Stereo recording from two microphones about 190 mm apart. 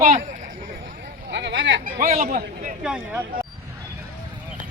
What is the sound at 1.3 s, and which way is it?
Speech, 70° right (ahead or behind).